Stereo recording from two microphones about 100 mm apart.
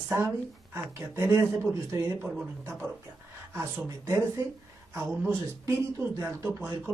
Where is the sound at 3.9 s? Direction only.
30° right (ahead or behind).